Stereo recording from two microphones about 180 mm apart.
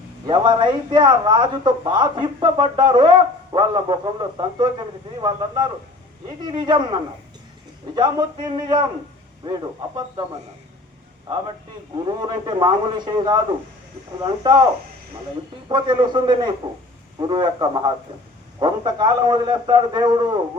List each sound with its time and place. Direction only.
0.3 s speech: 25° right (ahead or behind)
11.9 s speech: 25° right (ahead or behind)
15.7 s speech: 25° right (ahead or behind)